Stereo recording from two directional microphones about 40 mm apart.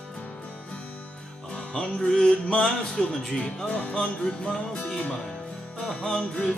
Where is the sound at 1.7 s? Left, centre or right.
Left.